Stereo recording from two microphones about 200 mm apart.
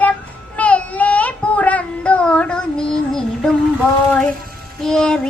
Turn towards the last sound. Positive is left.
turn(degrees=5)  # may be behind; listen again after turning